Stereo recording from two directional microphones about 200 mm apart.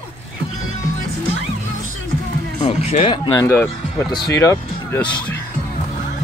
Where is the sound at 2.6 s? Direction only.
30° left (ahead or behind); by 5.3 s 10° left (ahead or behind).